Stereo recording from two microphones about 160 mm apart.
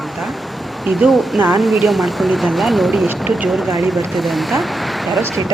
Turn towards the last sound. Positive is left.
turn(degrees=0)  # may be behind; listen again after turning